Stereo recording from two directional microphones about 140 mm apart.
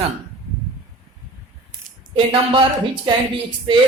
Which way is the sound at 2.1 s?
40° right (ahead or behind).